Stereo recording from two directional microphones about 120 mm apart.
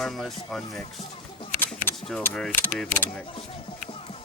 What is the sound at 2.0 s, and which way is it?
Speech, 5° left (ahead or behind).